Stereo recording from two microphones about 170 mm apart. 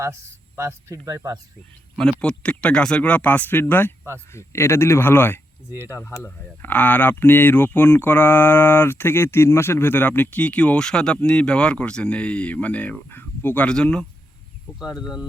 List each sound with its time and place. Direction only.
0.0 s speech: 15° right (ahead or behind)
2.2 s speech: 5° left (ahead or behind)